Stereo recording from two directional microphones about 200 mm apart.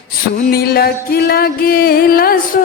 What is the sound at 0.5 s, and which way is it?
Music, 50° left (ahead or behind).